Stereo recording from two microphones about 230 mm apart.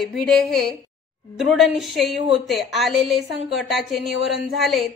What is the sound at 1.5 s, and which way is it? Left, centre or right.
A woman's voice, centre.